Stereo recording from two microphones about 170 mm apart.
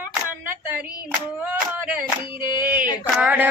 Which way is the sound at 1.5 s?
10° right (ahead or behind).